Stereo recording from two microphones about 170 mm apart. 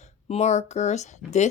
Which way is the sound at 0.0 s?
40° left (ahead or behind).